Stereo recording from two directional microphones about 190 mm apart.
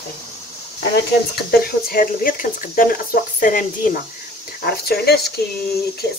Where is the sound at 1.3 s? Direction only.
55° left (ahead or behind).